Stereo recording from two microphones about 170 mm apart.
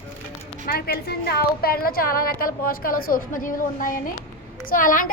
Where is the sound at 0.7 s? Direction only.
65° left (ahead or behind).